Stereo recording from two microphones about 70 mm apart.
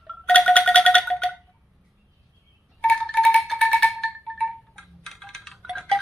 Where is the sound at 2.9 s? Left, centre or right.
Centre.